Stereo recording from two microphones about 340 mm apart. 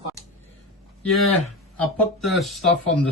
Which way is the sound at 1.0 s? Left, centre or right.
Centre.